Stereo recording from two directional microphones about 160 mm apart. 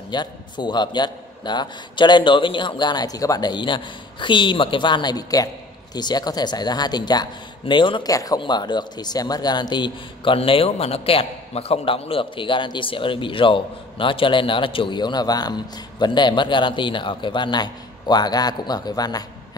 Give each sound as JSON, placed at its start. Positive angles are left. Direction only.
{"t": 0.1, "sound": "a man's voice", "side_deg": 30}